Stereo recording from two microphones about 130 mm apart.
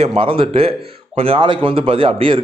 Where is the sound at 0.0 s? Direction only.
50° right (ahead or behind).